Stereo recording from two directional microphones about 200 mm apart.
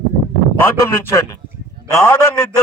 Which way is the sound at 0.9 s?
15° left (ahead or behind).